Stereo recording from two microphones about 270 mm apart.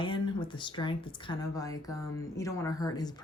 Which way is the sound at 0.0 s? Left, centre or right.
Centre.